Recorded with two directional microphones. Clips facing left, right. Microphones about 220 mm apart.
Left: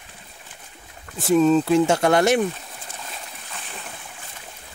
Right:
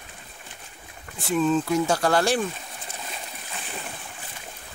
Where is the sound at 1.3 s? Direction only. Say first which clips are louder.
Left 6 dB; 40° left (ahead or behind); by 2.5 s 20° left (ahead or behind).